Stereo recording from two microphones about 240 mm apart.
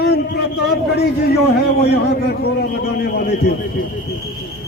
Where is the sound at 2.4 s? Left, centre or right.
Left.